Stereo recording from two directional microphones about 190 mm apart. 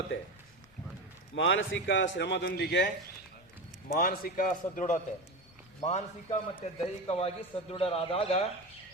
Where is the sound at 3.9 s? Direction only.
50° left (ahead or behind).